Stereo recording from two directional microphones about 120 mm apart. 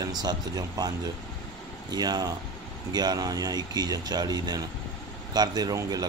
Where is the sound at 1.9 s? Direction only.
35° right (ahead or behind).